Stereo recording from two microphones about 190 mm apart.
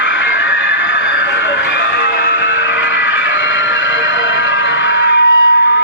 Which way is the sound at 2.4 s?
75° left (ahead or behind).